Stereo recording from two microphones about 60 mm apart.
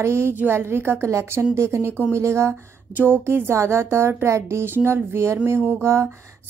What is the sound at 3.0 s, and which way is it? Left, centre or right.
Speech, right.